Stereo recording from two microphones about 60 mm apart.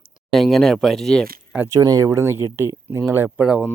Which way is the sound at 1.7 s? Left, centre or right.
Right.